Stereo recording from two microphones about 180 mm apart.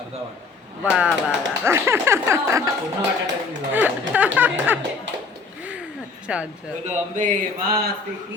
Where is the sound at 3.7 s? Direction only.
10° right (ahead or behind).